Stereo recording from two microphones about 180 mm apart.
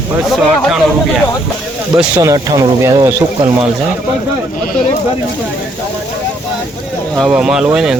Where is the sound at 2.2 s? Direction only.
20° right (ahead or behind).